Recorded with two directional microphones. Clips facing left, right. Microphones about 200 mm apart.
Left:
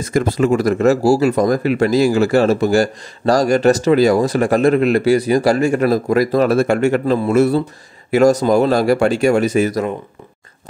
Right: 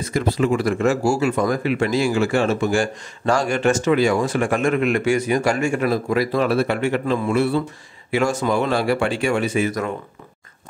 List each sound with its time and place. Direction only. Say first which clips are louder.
0.1 s speech: left 5 dB; 45° left (ahead or behind)